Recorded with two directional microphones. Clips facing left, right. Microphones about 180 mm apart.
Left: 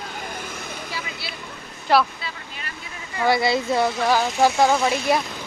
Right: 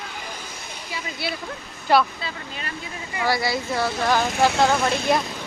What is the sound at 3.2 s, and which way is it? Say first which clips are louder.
Speech: left 4 dB; 20° left (ahead or behind).